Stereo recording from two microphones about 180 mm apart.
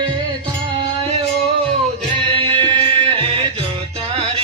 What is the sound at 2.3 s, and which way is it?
Music, 30° right (ahead or behind).